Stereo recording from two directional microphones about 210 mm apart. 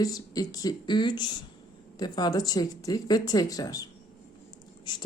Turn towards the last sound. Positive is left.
turn(degrees=20)  # may be behind; listen again after turning